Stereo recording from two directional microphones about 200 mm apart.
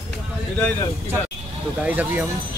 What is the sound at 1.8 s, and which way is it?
Speech, 10° right (ahead or behind).